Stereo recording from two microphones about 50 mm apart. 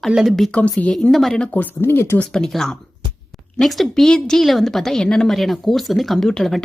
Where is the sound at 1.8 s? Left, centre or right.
Left.